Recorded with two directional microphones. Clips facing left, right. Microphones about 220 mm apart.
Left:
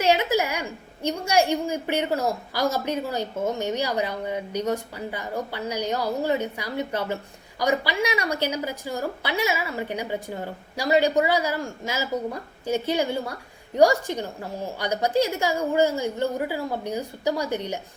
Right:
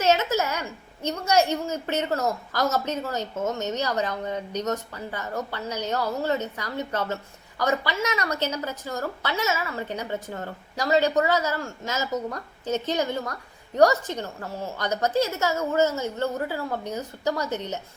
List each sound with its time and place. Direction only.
0.0 s a woman's voice: 15° left (ahead or behind)